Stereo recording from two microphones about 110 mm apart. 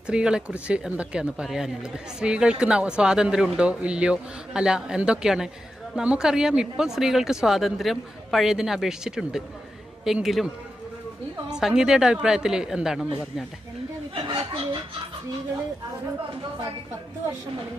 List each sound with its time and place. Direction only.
0.1 s speech: 10° right (ahead or behind)
11.5 s speech: 5° right (ahead or behind)
14.1 s speech: 55° right (ahead or behind)